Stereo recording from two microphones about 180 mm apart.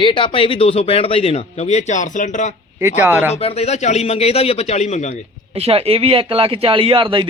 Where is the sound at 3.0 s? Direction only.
10° right (ahead or behind).